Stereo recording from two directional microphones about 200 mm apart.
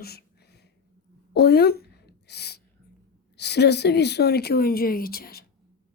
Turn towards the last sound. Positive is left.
turn(degrees=50)  # may be behind; listen again after turning